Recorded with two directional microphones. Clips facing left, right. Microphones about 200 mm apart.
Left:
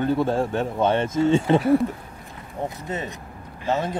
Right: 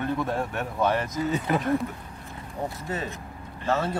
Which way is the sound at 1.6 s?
10° left (ahead or behind).